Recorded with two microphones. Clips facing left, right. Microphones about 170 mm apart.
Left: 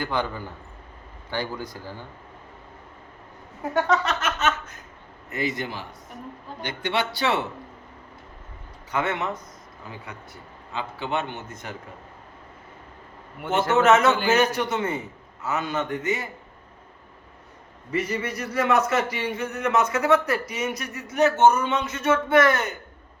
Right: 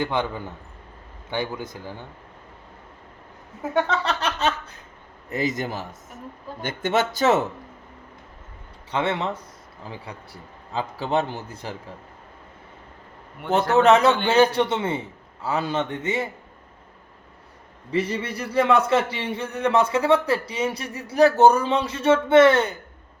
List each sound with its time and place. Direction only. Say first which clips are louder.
0.0 s a man's voice: right 2 dB; 20° right (ahead or behind)
3.8 s a man's voice: left 1 dB; 30° right (ahead or behind)
8.9 s a man's voice: right 2 dB; 30° right (ahead or behind)
13.7 s a man's voice: right 2 dB; 35° right (ahead or behind)
17.9 s a man's voice: right 2 dB; 30° right (ahead or behind)